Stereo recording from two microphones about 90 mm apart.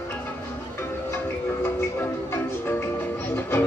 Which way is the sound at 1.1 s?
25° left (ahead or behind).